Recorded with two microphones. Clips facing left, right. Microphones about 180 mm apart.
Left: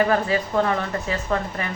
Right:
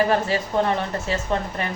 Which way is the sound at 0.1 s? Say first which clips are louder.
Even; 30° right (ahead or behind).